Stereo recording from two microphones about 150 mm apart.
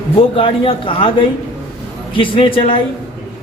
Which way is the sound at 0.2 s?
35° left (ahead or behind).